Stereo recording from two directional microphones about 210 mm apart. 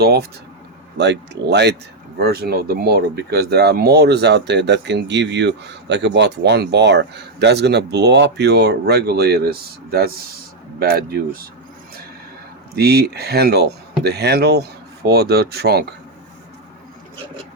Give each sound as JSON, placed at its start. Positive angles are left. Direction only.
{"t": 0.0, "sound": "speech", "side_deg": -50}
{"t": 12.7, "sound": "speech", "side_deg": -50}